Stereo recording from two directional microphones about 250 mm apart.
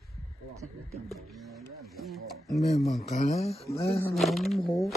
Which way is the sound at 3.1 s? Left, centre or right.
Left.